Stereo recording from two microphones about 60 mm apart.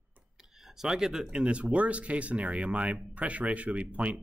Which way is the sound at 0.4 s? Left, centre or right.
Centre.